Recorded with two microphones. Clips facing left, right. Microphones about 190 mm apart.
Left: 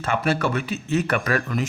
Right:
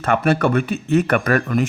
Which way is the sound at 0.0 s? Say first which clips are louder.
Right 5 dB; 60° right (ahead or behind).